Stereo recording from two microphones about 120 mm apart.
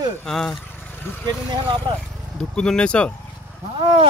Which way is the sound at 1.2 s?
40° right (ahead or behind).